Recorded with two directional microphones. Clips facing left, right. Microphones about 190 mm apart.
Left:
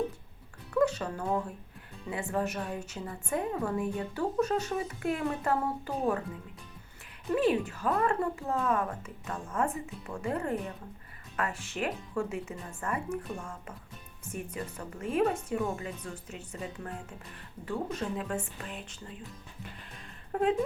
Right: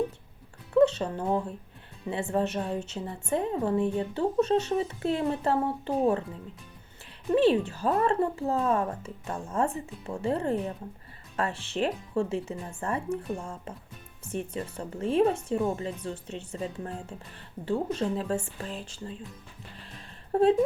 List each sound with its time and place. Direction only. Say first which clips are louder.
0.7 s a woman's voice: right 6 dB; 25° right (ahead or behind)
7.3 s a woman's voice: right 5 dB; 30° right (ahead or behind)
19.9 s a sound: right 8 dB; 35° right (ahead or behind)